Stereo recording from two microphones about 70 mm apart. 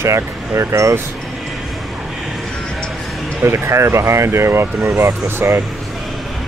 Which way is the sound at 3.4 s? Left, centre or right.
Right.